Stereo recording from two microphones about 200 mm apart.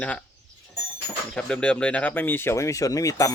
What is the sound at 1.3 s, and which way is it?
Speech, 5° left (ahead or behind).